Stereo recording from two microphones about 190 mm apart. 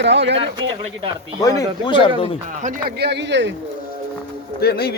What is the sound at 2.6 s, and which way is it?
Speech, 55° right (ahead or behind).